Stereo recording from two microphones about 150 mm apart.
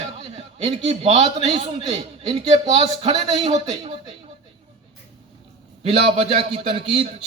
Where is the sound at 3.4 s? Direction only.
50° right (ahead or behind).